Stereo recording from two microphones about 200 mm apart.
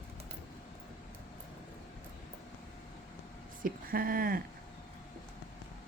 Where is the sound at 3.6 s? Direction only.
45° right (ahead or behind).